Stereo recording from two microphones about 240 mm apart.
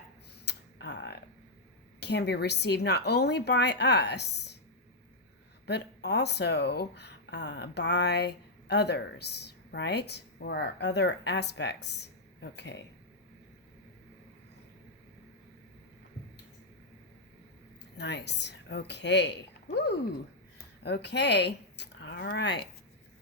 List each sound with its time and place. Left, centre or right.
0.4 s a sound: left
2.0 s speech: left
5.6 s speech: left
17.9 s speech: left
20.8 s speech: left